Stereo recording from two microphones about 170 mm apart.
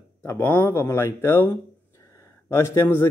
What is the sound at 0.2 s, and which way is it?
A man's voice, 10° left (ahead or behind).